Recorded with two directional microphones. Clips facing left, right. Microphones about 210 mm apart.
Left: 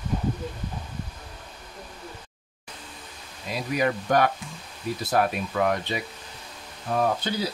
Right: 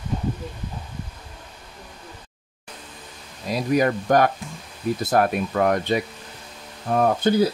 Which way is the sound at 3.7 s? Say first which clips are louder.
Right 4 dB; 45° right (ahead or behind).